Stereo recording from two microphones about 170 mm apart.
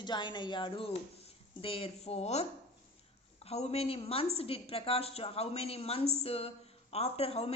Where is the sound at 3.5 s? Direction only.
35° left (ahead or behind).